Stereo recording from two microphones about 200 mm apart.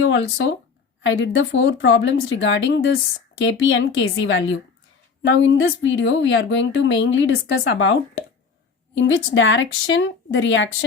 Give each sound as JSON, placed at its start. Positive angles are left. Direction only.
{"t": 0.0, "sound": "a woman's voice", "side_deg": 80}
{"t": 9.0, "sound": "a woman's voice", "side_deg": 70}